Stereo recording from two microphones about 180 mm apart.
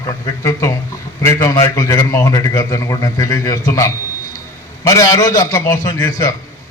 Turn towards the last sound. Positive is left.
turn(degrees=20)  # may be behind; listen again after turning